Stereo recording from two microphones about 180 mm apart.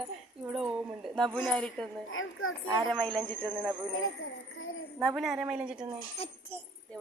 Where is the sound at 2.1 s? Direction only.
90° left.